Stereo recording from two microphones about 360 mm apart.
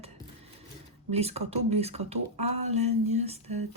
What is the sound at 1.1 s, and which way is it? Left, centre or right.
Speech, centre.